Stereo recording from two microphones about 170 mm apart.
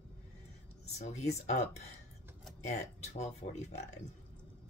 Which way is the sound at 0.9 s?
40° left (ahead or behind).